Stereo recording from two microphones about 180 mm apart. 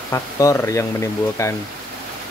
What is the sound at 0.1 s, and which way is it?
Speech, 15° left (ahead or behind).